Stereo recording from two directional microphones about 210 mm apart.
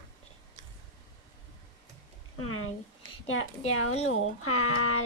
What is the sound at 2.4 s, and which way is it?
Speech, 85° left.